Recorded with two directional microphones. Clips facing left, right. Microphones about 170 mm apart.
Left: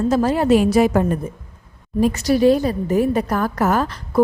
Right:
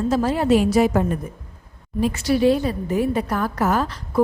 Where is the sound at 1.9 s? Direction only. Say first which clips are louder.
Left 3 dB; 40° left (ahead or behind).